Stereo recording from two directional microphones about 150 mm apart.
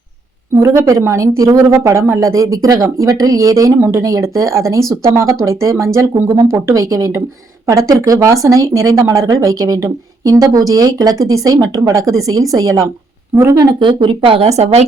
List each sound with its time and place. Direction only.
0.5 s a woman's voice: 20° right (ahead or behind); by 14.8 s 45° right (ahead or behind)